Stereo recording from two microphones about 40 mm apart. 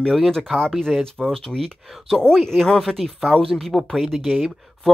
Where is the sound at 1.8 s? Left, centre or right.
Centre.